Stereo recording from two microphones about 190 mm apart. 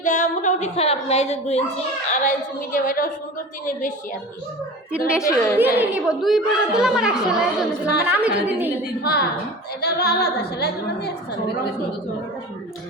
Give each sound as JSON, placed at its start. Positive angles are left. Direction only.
{"t": 0.0, "sound": "speech", "side_deg": 40}
{"t": 2.7, "sound": "a woman's voice", "side_deg": 45}
{"t": 5.1, "sound": "a woman's voice", "side_deg": 15}
{"t": 5.5, "sound": "a woman's voice", "side_deg": -10}
{"t": 9.0, "sound": "speech", "side_deg": 55}